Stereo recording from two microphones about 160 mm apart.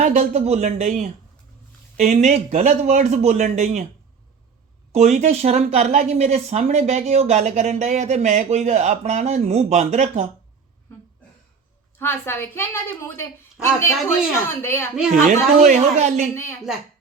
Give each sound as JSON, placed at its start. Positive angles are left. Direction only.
{"t": 0.0, "sound": "speech", "side_deg": -50}
{"t": 4.9, "sound": "speech", "side_deg": -45}
{"t": 11.9, "sound": "a woman's voice", "side_deg": 15}
{"t": 15.3, "sound": "speech", "side_deg": -50}
{"t": 16.3, "sound": "a woman's voice", "side_deg": 15}